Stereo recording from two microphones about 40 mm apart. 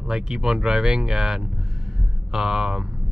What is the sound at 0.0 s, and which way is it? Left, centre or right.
Speech, centre.